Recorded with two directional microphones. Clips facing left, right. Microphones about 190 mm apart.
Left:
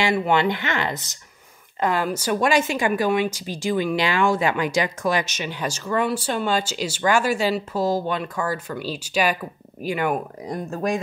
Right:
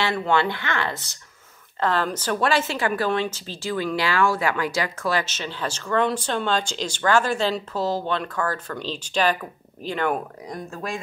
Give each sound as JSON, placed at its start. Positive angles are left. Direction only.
{"t": 0.0, "sound": "a woman's voice", "side_deg": 15}
{"t": 10.5, "sound": "speech", "side_deg": 40}